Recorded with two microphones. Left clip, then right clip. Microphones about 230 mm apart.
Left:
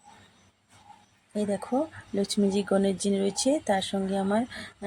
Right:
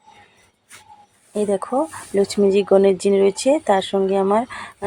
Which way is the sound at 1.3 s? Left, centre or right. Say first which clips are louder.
Right 9 dB; centre.